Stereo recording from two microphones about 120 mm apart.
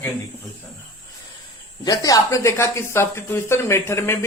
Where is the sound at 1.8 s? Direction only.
30° left (ahead or behind).